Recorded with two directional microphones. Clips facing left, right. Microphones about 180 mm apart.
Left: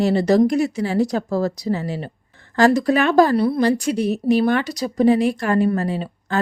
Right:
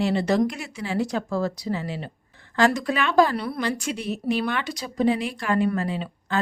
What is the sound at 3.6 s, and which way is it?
A woman's voice, 40° left (ahead or behind).